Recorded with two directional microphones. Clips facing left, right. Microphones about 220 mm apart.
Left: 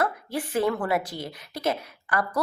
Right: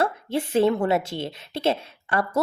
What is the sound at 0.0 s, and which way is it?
A woman's voice, 25° right (ahead or behind).